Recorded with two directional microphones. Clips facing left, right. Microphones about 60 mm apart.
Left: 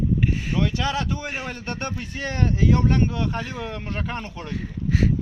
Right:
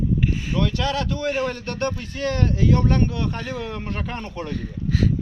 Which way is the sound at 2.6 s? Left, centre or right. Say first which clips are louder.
Even; centre.